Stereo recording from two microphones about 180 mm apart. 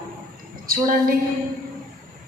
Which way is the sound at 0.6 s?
50° right (ahead or behind).